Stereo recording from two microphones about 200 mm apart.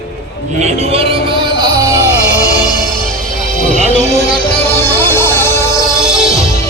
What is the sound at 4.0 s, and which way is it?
Music, 35° left (ahead or behind).